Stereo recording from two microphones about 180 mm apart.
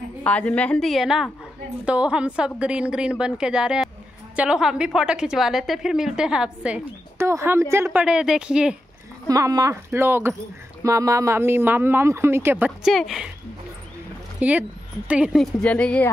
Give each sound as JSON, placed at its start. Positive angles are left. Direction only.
{"t": 0.2, "sound": "a woman's voice", "side_deg": 5}
{"t": 9.3, "sound": "speech", "side_deg": -20}
{"t": 14.4, "sound": "speech", "side_deg": -10}
{"t": 15.6, "sound": "speech", "side_deg": 5}